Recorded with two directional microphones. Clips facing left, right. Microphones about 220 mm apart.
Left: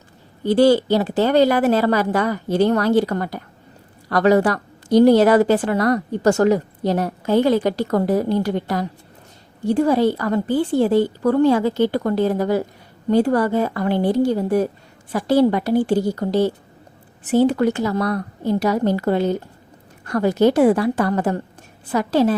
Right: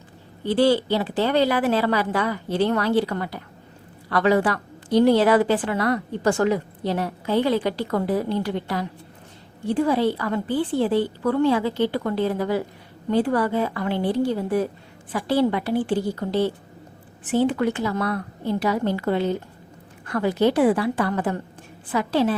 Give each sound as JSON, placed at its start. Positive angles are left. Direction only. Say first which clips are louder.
{"t": 0.4, "sound": "a woman's voice", "louder": "left 5 dB", "side_deg": 45}